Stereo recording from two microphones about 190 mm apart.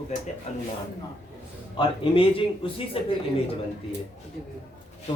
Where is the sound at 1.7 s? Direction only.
25° left (ahead or behind).